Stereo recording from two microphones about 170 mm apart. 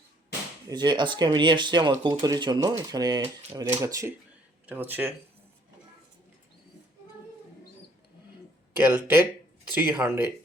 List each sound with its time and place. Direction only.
0.7 s speech: 25° right (ahead or behind)
8.7 s speech: 10° right (ahead or behind)